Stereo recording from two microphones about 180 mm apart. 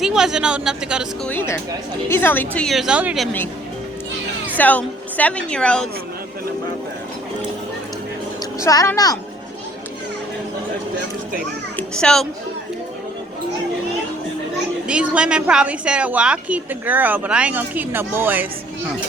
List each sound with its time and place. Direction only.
0.0 s speech: centre (ahead or behind)
1.3 s a woman's voice: 15° left (ahead or behind); by 3.2 s 5° right (ahead or behind)
4.5 s a woman's voice: 10° left (ahead or behind)
8.6 s a child's voice: 20° left (ahead or behind)
11.8 s a child's voice: 5° left (ahead or behind)
14.8 s a woman's voice: 5° right (ahead or behind)